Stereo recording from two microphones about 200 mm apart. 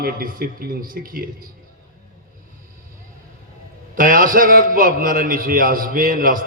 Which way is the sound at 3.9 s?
45° right (ahead or behind).